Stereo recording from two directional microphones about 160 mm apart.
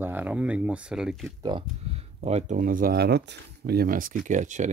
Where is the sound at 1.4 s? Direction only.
35° right (ahead or behind).